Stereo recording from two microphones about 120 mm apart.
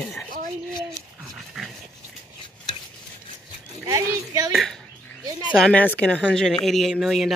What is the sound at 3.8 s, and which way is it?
Speech, 25° right (ahead or behind).